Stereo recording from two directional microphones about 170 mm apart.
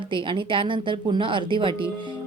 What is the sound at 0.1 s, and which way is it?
A woman's voice, 30° right (ahead or behind).